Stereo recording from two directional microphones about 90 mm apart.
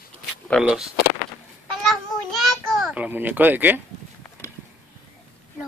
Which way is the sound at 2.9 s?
20° right (ahead or behind).